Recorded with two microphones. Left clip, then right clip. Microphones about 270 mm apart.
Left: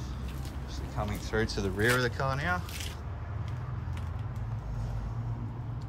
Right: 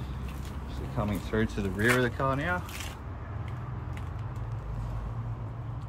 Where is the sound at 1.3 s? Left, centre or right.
Left.